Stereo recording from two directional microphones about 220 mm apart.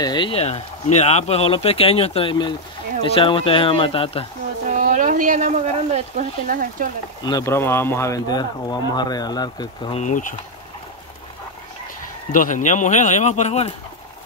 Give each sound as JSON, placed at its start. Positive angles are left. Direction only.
{"t": 0.0, "sound": "speech", "side_deg": 20}
{"t": 4.6, "sound": "a sound", "side_deg": -35}
{"t": 7.2, "sound": "speech", "side_deg": 15}
{"t": 12.3, "sound": "speech", "side_deg": 35}